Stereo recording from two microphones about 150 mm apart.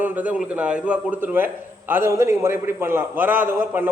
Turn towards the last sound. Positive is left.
turn(degrees=-15)  # may be behind; listen again after turning